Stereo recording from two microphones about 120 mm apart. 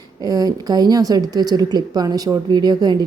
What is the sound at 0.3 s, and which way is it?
A woman's voice, 30° right (ahead or behind).